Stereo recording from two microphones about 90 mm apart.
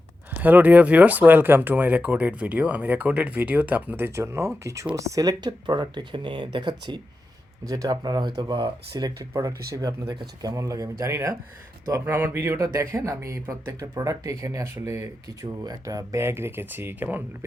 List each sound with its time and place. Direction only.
0.4 s speech: 20° right (ahead or behind); by 7.0 s 55° right (ahead or behind)
7.6 s speech: 40° right (ahead or behind)
9.3 s speech: 35° right (ahead or behind)
10.1 s speech: 50° right (ahead or behind); by 15.4 s 30° right (ahead or behind)
15.6 s speech: 40° right (ahead or behind)
16.2 s speech: 25° right (ahead or behind)